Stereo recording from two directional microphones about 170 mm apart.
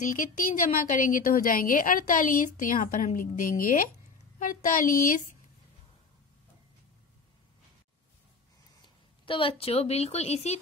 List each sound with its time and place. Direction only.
0.0 s a woman's voice: 50° left (ahead or behind)
8.8 s speech: 30° left (ahead or behind)